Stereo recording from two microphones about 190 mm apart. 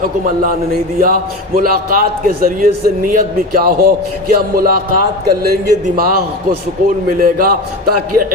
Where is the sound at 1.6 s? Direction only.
50° right (ahead or behind).